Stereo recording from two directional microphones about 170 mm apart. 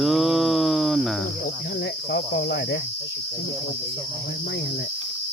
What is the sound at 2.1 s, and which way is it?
Cricket, 90° left.